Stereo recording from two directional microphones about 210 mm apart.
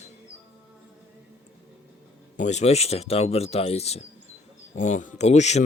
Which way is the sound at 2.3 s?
35° left (ahead or behind).